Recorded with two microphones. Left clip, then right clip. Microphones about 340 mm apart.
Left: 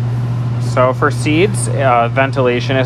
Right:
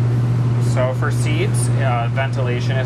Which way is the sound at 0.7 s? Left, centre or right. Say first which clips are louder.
Left 10 dB; centre.